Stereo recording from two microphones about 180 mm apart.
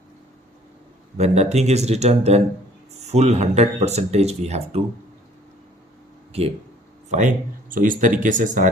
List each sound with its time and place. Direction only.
1.2 s speech: 40° right (ahead or behind)
7.1 s speech: 45° right (ahead or behind)